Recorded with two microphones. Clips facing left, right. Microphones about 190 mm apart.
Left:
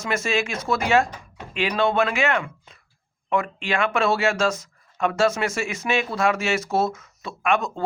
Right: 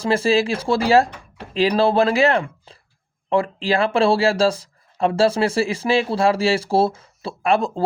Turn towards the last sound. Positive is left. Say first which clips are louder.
# right 4 dB
turn(degrees=-30)  # may be behind; listen again after turning